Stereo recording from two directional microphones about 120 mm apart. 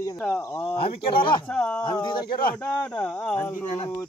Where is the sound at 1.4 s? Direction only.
10° left (ahead or behind).